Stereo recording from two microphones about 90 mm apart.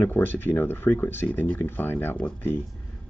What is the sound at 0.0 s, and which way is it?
Speech, 25° left (ahead or behind).